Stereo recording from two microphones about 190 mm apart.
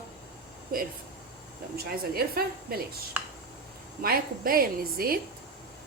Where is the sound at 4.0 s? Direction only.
50° right (ahead or behind).